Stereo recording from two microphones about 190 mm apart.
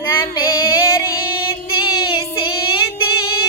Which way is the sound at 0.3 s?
20° left (ahead or behind).